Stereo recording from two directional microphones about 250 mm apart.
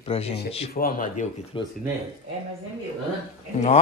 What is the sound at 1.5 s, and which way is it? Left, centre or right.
Speech, centre.